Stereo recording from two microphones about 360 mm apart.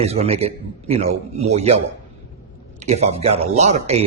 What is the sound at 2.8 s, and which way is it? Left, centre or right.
A man's voice, centre.